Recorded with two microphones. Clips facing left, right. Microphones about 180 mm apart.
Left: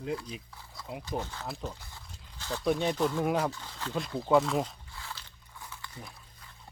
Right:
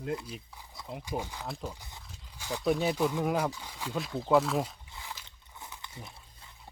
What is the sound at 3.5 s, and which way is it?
Speech, 10° right (ahead or behind).